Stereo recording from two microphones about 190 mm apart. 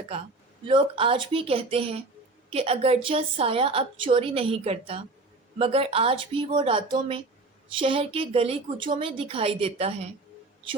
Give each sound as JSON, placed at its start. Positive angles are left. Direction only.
{"t": 0.6, "sound": "a woman's voice", "side_deg": -25}